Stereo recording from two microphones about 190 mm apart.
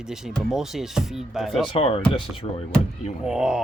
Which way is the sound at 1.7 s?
30° left (ahead or behind).